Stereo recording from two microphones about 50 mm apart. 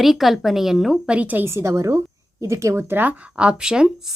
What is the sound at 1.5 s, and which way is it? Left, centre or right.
A woman's voice, right.